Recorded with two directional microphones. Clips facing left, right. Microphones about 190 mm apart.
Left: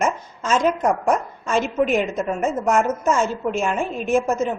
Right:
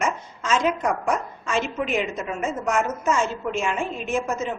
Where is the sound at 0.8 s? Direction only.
45° left (ahead or behind).